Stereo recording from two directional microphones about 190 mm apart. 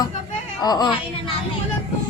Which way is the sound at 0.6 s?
20° left (ahead or behind).